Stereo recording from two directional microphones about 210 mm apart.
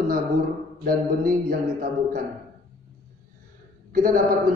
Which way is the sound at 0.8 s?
45° right (ahead or behind).